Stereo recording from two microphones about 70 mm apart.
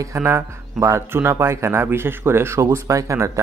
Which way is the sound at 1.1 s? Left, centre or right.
Right.